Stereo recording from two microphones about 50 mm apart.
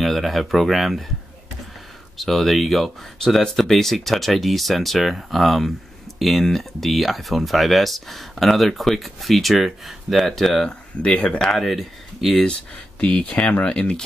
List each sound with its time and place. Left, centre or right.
0.0 s speech: centre
2.1 s speech: centre
10.7 s speech: left
11.5 s speech: centre
13.0 s speech: left